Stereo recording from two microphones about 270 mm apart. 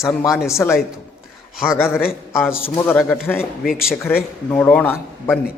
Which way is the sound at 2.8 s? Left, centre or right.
Centre.